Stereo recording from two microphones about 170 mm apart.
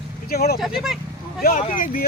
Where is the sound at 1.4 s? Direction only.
50° left (ahead or behind).